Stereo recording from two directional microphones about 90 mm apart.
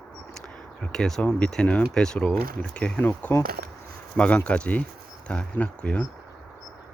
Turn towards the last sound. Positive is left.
turn(degrees=15)  # may be behind; listen again after turning